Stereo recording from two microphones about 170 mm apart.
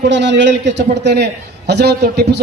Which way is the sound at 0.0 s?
90° right.